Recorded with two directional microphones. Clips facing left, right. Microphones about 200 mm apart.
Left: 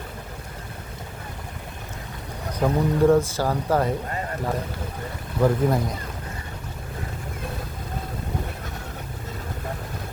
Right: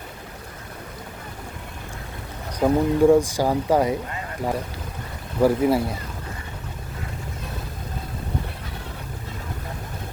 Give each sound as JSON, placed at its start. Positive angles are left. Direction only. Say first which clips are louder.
{"t": 2.6, "sound": "speech", "louder": "right 3 dB", "side_deg": -15}
{"t": 5.4, "sound": "speech", "louder": "right 3 dB", "side_deg": -10}